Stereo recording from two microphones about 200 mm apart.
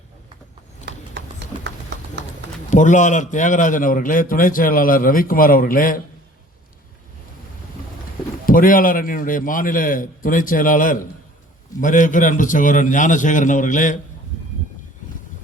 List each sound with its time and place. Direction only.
2.6 s a man's voice: 40° left (ahead or behind)
8.4 s a man's voice: 45° left (ahead or behind)